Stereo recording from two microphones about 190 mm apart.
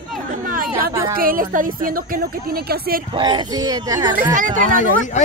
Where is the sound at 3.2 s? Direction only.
25° right (ahead or behind).